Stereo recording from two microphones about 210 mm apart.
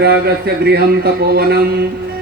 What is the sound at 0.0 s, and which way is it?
Speech, 50° right (ahead or behind).